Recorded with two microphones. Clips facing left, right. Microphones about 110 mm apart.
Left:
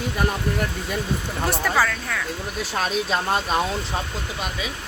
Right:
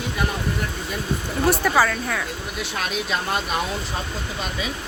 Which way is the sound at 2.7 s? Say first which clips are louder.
Left 3 dB; 35° left (ahead or behind).